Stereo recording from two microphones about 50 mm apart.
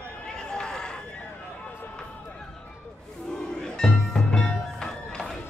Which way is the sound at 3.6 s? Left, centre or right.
Centre.